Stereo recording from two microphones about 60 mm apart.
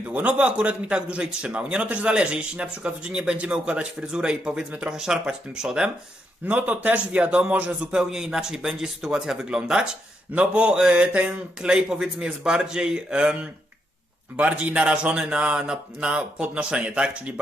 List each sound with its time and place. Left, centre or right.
0.0 s a man's voice: right
6.4 s speech: right
7.9 s a man's voice: centre